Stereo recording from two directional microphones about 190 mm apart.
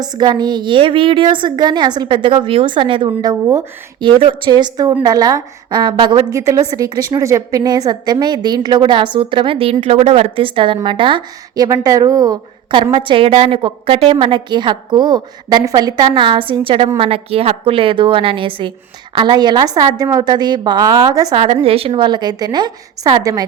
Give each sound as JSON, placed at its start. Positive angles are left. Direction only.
{"t": 0.0, "sound": "a woman's voice", "side_deg": -20}
{"t": 21.4, "sound": "a woman's voice", "side_deg": -30}